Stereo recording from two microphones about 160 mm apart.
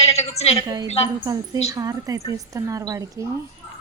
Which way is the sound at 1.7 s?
20° right (ahead or behind).